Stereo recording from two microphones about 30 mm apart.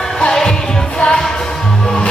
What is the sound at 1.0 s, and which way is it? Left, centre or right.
Music, left.